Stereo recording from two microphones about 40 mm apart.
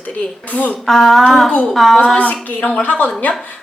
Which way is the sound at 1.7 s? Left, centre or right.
Centre.